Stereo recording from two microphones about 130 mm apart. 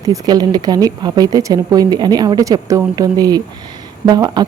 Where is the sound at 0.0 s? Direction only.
30° right (ahead or behind).